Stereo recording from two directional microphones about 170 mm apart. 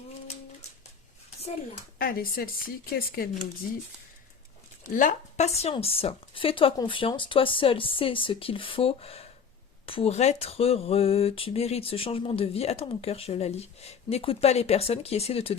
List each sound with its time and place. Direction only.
2.0 s speech: 60° left (ahead or behind)
4.9 s speech: 50° left (ahead or behind)